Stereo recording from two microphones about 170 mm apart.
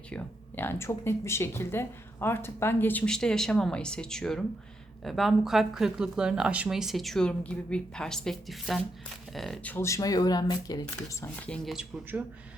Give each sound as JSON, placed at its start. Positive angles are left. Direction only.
{"t": 0.1, "sound": "speech", "side_deg": 10}
{"t": 9.7, "sound": "speech", "side_deg": 15}
{"t": 11.4, "sound": "speech", "side_deg": 5}